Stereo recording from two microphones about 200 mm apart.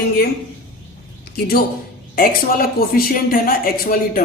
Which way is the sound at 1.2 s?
50° left (ahead or behind).